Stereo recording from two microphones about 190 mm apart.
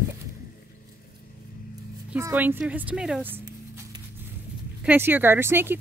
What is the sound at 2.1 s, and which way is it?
Speech, 10° right (ahead or behind).